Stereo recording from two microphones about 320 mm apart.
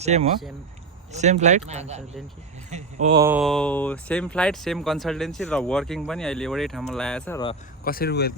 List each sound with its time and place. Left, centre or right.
0.0 s speech: right; by 7.5 s centre
7.9 s speech: left